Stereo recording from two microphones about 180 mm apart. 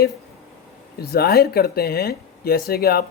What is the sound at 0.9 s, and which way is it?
Speech, 60° left (ahead or behind).